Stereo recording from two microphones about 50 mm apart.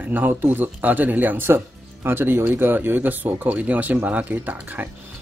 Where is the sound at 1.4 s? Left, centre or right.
Right.